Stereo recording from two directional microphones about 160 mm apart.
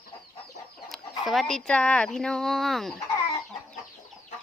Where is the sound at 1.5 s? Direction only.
5° left (ahead or behind).